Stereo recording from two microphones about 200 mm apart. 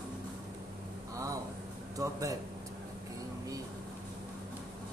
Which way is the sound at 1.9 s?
15° right (ahead or behind).